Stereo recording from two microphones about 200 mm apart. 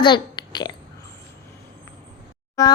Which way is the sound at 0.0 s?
20° left (ahead or behind).